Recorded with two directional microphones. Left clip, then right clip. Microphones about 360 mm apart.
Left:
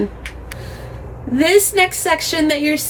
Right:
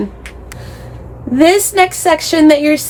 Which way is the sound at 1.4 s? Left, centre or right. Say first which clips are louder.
Right 4 dB; centre.